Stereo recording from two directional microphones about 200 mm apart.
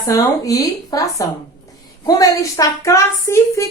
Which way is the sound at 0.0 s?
15° left (ahead or behind).